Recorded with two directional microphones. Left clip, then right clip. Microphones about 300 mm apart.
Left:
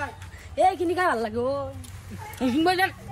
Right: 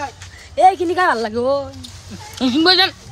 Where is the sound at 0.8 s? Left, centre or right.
Right.